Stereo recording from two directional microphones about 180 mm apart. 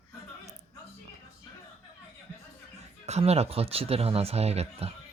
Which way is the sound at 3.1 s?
35° right (ahead or behind).